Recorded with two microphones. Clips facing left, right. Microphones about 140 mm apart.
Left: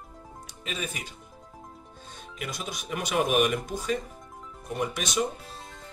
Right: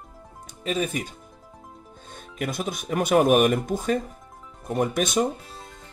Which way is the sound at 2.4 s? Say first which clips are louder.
Right 8 dB; 55° right (ahead or behind).